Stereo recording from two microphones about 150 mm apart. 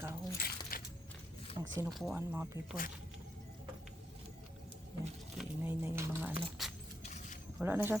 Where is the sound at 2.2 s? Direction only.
15° right (ahead or behind).